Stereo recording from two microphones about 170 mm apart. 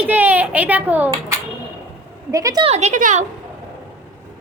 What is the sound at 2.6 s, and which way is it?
Speech, 40° right (ahead or behind).